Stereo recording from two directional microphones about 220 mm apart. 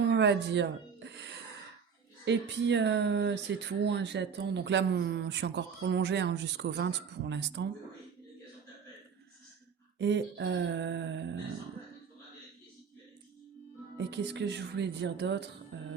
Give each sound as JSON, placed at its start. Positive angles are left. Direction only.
{"t": 0.0, "sound": "music", "side_deg": -50}
{"t": 2.2, "sound": "speech", "side_deg": -55}
{"t": 10.0, "sound": "speech", "side_deg": -50}
{"t": 14.0, "sound": "speech", "side_deg": -50}
{"t": 15.7, "sound": "music", "side_deg": -55}